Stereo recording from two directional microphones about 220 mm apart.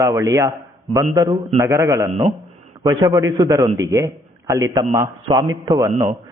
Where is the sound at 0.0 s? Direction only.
15° right (ahead or behind).